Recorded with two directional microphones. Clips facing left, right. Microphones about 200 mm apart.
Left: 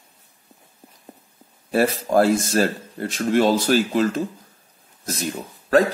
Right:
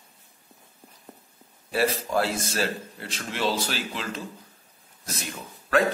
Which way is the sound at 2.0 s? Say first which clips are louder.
Left 9 dB; 45° left (ahead or behind).